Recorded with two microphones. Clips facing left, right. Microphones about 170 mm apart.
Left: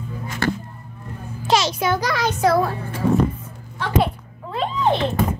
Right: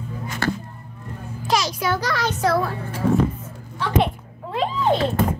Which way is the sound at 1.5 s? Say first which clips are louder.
Left 3 dB; 25° left (ahead or behind).